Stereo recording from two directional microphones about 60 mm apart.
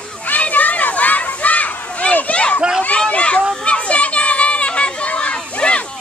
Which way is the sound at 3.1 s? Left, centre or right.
Centre.